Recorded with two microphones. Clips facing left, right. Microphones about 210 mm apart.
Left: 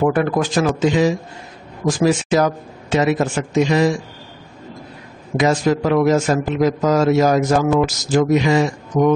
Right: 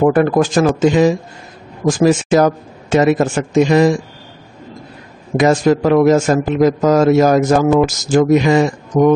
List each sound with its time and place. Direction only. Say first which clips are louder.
0.0 s a man's voice: right 5 dB; 45° right (ahead or behind)
5.4 s a man's voice: right 4 dB; 50° right (ahead or behind)